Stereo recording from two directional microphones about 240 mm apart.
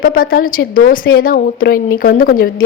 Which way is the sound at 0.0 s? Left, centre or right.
Left.